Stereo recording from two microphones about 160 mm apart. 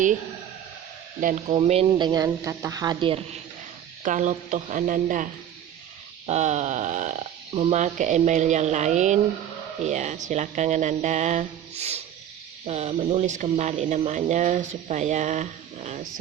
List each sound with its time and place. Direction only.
1.2 s speech: 55° right (ahead or behind)
1.5 s a woman's voice: 40° right (ahead or behind)
4.0 s speech: 50° right (ahead or behind)
6.2 s speech: 45° right (ahead or behind)